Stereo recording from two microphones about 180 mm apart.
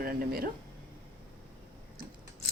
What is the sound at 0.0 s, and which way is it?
Speech, 55° right (ahead or behind).